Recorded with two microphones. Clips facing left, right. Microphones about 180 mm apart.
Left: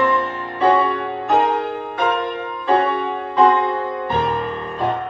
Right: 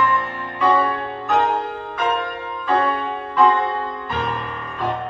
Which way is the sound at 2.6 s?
25° left (ahead or behind).